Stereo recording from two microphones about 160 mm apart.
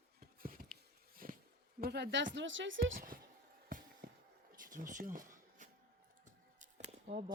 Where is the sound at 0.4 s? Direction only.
65° right (ahead or behind).